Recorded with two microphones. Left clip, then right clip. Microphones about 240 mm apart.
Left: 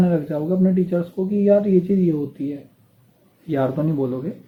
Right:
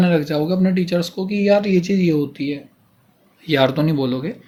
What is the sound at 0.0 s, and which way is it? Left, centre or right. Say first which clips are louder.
Speech: right 3 dB; right.